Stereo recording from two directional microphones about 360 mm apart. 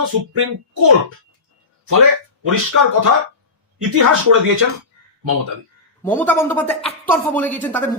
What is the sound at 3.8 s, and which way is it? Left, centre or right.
Speech, right.